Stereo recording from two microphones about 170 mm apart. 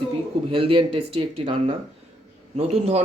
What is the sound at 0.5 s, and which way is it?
Speech, 35° right (ahead or behind).